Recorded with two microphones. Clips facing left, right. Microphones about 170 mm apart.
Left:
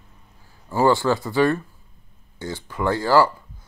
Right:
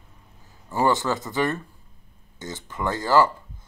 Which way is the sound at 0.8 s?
20° right (ahead or behind).